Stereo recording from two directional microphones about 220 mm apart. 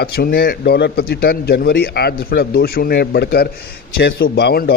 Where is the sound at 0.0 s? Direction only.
45° left (ahead or behind).